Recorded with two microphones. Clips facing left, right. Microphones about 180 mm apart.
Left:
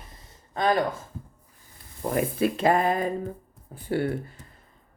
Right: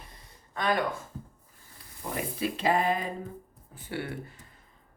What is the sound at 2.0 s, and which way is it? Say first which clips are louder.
Speech: left 8 dB; 55° left (ahead or behind).